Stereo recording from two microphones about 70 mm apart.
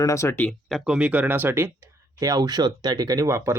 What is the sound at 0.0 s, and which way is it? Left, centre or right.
Speech, left.